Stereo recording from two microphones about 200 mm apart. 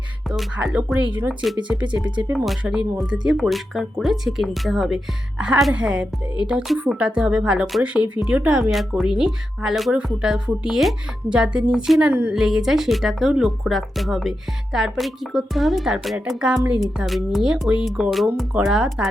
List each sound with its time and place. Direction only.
0.3 s speech: centre (ahead or behind)